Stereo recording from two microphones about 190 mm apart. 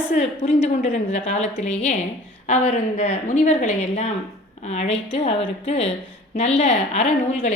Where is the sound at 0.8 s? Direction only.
40° left (ahead or behind).